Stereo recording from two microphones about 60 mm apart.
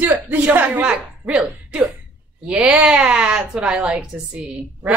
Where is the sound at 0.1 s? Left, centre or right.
Right.